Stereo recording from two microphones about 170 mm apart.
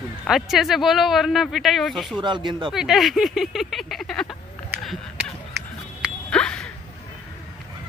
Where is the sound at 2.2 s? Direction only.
25° right (ahead or behind).